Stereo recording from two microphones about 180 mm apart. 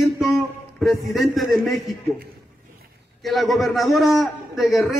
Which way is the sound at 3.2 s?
Centre (ahead or behind).